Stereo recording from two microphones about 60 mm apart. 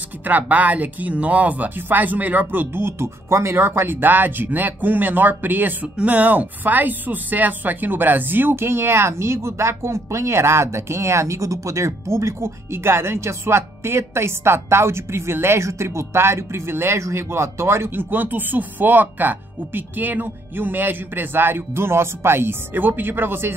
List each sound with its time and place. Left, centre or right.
0.2 s speech: right